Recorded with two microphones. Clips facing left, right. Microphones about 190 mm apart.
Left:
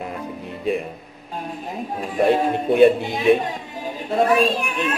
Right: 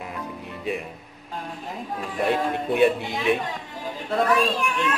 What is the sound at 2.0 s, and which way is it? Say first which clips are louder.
Speech: left 6 dB; 30° left (ahead or behind).